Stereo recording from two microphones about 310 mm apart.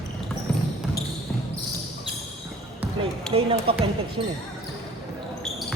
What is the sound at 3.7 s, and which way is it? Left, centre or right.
Speech, centre.